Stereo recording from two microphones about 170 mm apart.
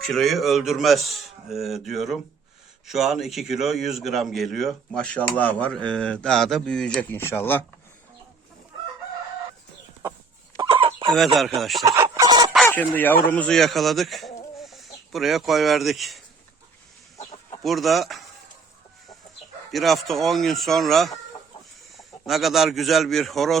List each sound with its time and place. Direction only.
0.0 s a man's voice: centre (ahead or behind)
10.6 s chicken: 30° right (ahead or behind)
11.3 s a man's voice: centre (ahead or behind)
11.9 s chicken: 20° right (ahead or behind)
12.6 s a man's voice: 10° left (ahead or behind)
17.6 s a man's voice: centre (ahead or behind)
19.7 s a man's voice: centre (ahead or behind)
22.3 s a man's voice: centre (ahead or behind)